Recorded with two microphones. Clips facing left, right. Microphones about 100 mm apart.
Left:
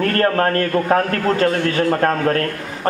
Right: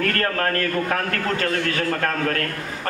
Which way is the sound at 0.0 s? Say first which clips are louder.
Left 6 dB; 30° left (ahead or behind).